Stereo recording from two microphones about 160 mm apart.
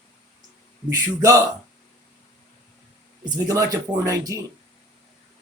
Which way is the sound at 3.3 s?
20° right (ahead or behind).